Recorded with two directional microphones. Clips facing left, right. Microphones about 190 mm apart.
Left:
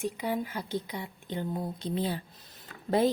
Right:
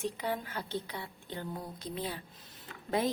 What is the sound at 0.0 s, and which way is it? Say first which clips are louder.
A woman's voice: left 4 dB; 10° left (ahead or behind).